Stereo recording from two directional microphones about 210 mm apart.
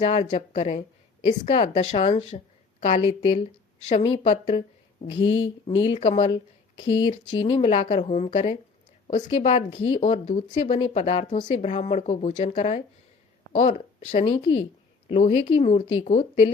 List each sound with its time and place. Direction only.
0.0 s a woman's voice: 30° left (ahead or behind)
16.0 s speech: 35° left (ahead or behind)